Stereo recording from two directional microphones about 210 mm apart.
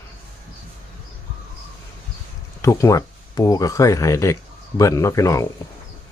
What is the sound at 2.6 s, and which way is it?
Speech, 15° left (ahead or behind).